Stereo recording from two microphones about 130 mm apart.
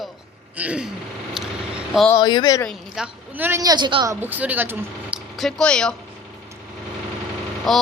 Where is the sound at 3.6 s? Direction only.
35° right (ahead or behind).